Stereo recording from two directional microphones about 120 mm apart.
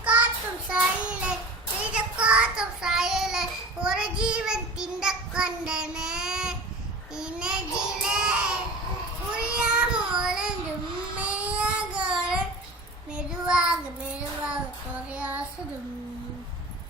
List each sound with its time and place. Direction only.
0.7 s child singing: 10° right (ahead or behind)